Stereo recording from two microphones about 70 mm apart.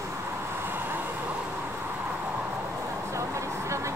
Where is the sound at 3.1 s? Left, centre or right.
Right.